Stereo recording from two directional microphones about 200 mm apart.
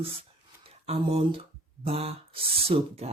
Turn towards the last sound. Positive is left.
turn(degrees=-30)  # may be behind; listen again after turning